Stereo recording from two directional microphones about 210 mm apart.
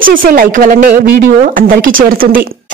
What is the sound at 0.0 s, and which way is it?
Speech, 40° right (ahead or behind).